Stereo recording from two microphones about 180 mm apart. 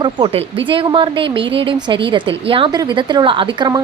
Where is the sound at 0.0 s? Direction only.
30° right (ahead or behind).